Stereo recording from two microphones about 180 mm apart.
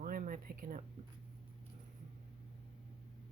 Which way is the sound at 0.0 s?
50° right (ahead or behind).